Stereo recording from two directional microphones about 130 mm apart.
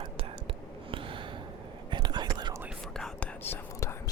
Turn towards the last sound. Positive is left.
turn(degrees=20)  # may be behind; listen again after turning